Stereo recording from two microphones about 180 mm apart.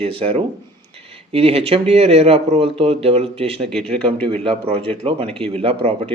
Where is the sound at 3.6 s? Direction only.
5° left (ahead or behind).